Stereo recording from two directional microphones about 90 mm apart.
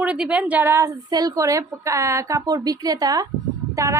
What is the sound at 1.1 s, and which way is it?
A woman's voice, 40° right (ahead or behind).